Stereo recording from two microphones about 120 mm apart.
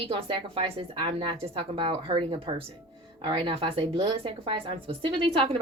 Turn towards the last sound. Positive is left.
turn(degrees=-50)  # may be behind; listen again after turning